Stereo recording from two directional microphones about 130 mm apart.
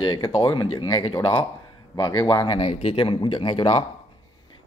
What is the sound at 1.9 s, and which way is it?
Speech, 30° left (ahead or behind).